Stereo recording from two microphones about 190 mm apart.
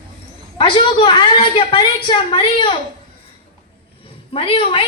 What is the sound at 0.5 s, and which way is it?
A woman's voice, 25° left (ahead or behind).